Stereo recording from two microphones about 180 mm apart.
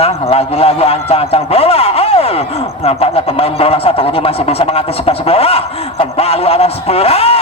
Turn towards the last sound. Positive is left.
turn(degrees=35)  # may be behind; listen again after turning